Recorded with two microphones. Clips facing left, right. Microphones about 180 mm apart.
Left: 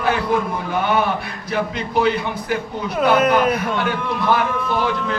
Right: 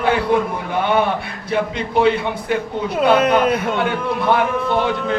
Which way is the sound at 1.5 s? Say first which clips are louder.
Right 2 dB; 25° right (ahead or behind).